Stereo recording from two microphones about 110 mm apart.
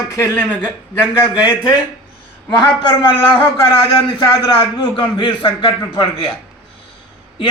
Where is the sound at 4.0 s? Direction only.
45° left (ahead or behind).